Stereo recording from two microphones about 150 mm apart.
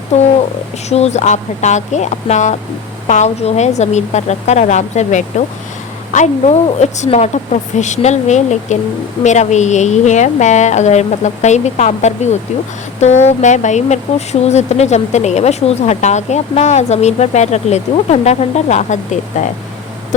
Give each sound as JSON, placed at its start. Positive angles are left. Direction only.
{"t": 0.1, "sound": "speech", "side_deg": 50}